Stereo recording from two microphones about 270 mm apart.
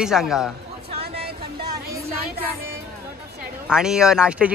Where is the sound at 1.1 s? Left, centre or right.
Centre.